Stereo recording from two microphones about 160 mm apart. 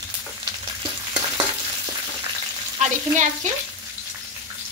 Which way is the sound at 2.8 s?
50° right (ahead or behind).